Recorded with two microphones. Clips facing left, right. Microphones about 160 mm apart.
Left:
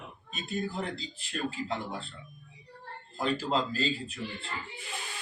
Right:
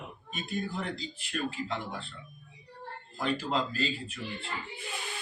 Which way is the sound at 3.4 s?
35° left (ahead or behind).